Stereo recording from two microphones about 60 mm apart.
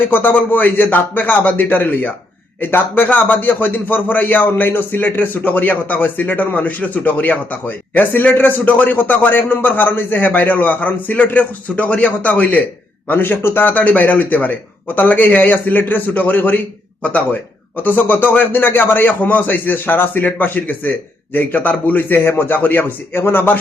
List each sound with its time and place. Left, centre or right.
0.0 s a man's voice: left